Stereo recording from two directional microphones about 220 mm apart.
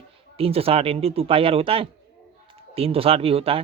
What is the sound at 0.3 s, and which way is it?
Speech, 25° right (ahead or behind).